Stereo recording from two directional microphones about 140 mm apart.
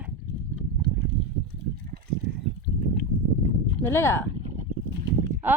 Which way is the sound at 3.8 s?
15° left (ahead or behind).